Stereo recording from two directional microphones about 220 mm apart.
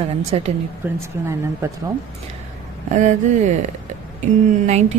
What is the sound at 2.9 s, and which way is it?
Speech, 35° right (ahead or behind).